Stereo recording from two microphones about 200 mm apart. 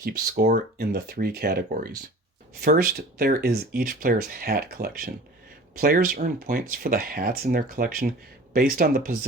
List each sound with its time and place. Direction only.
0.0 s speech: 50° right (ahead or behind)